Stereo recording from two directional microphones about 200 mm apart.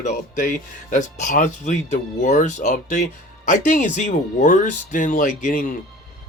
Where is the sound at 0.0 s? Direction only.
40° left (ahead or behind).